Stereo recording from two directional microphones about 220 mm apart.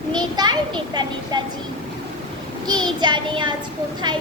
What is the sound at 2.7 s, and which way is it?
Child singing, 20° right (ahead or behind).